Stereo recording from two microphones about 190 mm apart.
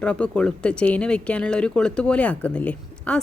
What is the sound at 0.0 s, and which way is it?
Speech, 5° left (ahead or behind).